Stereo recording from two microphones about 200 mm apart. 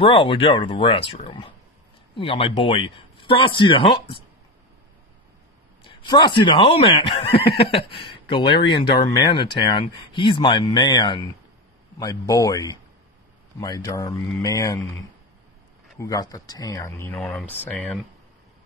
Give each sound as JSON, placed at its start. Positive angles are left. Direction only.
{"t": 0.0, "sound": "speech", "side_deg": 25}
{"t": 5.9, "sound": "speech", "side_deg": 20}
{"t": 16.0, "sound": "speech", "side_deg": 15}
{"t": 17.2, "sound": "speech", "side_deg": 0}